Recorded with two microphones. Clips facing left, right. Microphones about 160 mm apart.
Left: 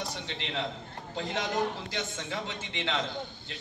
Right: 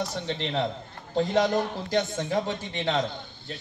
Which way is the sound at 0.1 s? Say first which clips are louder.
Right 7 dB; 40° right (ahead or behind).